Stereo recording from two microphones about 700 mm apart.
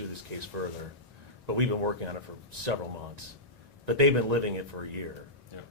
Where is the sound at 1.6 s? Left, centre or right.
Right.